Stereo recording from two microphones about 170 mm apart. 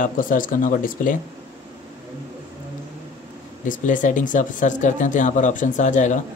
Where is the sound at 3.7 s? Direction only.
50° left (ahead or behind).